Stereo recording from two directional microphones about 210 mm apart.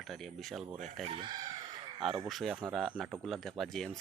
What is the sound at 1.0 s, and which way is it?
Speech, 25° right (ahead or behind).